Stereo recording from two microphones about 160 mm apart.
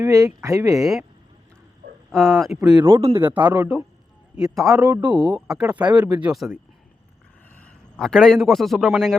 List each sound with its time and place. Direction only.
0.0 s speech: 20° right (ahead or behind)
2.1 s speech: centre (ahead or behind)
2.6 s speech: 30° right (ahead or behind)
3.2 s speech: 10° right (ahead or behind)
4.8 s speech: 20° right (ahead or behind)
5.3 s speech: 5° right (ahead or behind)
7.5 s a man's voice: 5° left (ahead or behind)